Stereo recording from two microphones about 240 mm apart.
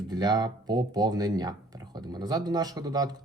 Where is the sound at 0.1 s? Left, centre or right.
Centre.